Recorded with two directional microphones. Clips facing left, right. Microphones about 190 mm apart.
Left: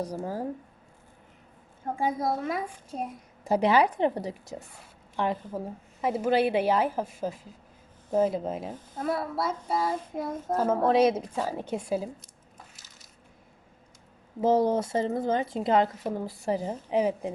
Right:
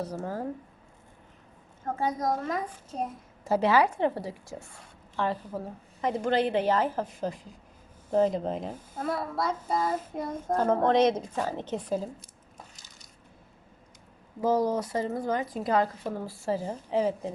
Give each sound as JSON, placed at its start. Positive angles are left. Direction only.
{"t": 0.0, "sound": "a child's voice", "side_deg": 10}
{"t": 1.8, "sound": "a child's voice", "side_deg": 10}
{"t": 8.1, "sound": "child singing", "side_deg": 5}
{"t": 14.4, "sound": "a child's voice", "side_deg": 25}